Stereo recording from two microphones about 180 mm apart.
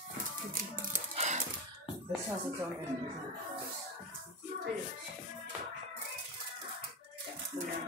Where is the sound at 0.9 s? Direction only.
40° right (ahead or behind).